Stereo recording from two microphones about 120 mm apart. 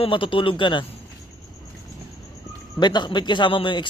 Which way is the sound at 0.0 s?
45° left (ahead or behind).